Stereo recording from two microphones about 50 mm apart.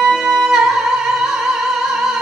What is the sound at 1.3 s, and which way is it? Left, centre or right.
Music, centre.